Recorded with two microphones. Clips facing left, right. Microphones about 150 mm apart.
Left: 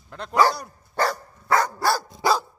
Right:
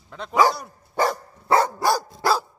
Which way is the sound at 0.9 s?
25° right (ahead or behind).